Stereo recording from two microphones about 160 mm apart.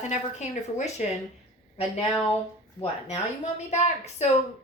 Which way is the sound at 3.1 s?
45° left (ahead or behind).